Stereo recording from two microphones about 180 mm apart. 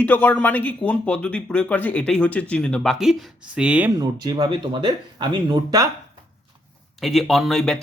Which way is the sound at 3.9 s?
20° right (ahead or behind).